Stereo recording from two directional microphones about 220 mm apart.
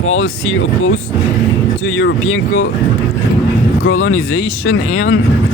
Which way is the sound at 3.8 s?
70° left (ahead or behind).